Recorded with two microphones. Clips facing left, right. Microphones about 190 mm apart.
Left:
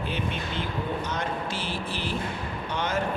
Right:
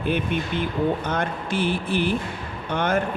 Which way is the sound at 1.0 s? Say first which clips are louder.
Right 4 dB; 55° right (ahead or behind).